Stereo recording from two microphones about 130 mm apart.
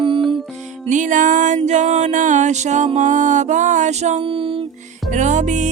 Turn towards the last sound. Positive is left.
turn(degrees=-70)  # may be behind; listen again after turning